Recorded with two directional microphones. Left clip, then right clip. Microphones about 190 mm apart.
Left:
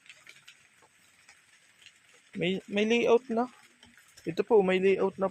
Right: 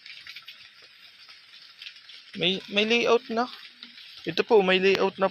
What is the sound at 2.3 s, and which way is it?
Speech, 15° left (ahead or behind).